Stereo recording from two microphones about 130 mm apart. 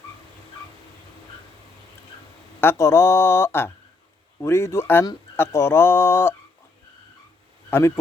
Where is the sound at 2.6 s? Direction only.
20° left (ahead or behind).